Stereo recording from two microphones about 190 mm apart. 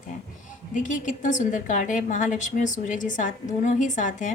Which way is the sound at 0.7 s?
40° left (ahead or behind).